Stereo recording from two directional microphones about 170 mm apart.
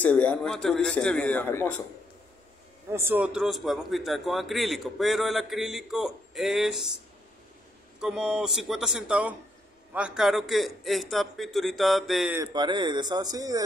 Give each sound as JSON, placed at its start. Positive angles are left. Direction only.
{"t": 0.0, "sound": "a man's voice", "side_deg": 10}
{"t": 2.9, "sound": "a man's voice", "side_deg": -15}
{"t": 8.0, "sound": "a man's voice", "side_deg": -5}
{"t": 12.4, "sound": "a man's voice", "side_deg": -25}